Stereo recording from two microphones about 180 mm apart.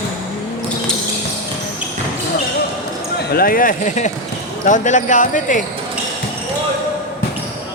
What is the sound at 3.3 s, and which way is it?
Speech, 55° left (ahead or behind).